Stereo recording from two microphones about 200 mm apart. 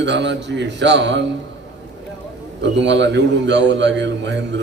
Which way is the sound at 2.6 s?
60° right (ahead or behind).